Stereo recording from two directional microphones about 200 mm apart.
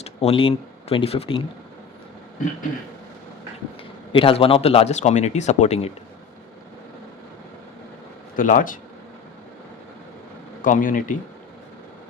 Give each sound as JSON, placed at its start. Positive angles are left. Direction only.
{"t": 0.0, "sound": "speech", "side_deg": 30}
{"t": 4.1, "sound": "speech", "side_deg": 25}
{"t": 8.4, "sound": "speech", "side_deg": 45}
{"t": 10.6, "sound": "speech", "side_deg": 40}